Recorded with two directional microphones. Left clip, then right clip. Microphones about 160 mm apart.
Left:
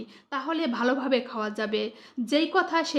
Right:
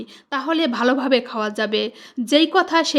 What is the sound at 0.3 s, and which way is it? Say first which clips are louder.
Speech: right 8 dB; 35° right (ahead or behind).